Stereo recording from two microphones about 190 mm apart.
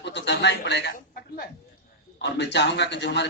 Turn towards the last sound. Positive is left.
turn(degrees=65)  # may be behind; listen again after turning